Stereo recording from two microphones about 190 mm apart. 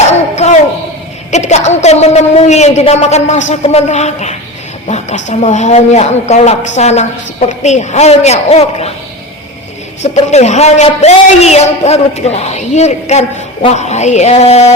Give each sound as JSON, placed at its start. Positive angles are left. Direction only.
{"t": 0.1, "sound": "a sound", "side_deg": 35}
{"t": 1.3, "sound": "speech", "side_deg": 35}
{"t": 10.0, "sound": "speech", "side_deg": 35}